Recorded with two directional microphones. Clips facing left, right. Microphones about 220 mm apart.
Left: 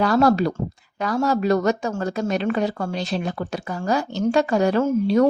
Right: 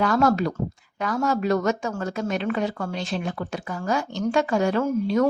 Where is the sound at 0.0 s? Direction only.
35° left (ahead or behind).